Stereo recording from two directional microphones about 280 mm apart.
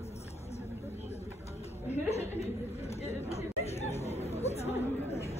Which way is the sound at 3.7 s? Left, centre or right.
Left.